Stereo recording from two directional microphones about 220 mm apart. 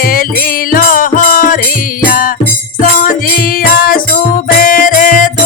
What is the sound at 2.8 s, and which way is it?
Music, 40° left (ahead or behind).